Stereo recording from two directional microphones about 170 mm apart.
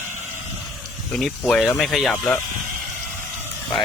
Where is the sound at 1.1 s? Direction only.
5° left (ahead or behind).